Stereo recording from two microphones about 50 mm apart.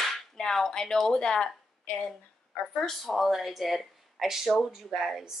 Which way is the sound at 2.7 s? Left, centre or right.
Centre.